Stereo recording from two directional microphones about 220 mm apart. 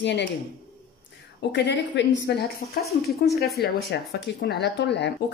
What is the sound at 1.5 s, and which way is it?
Speech, 50° left (ahead or behind).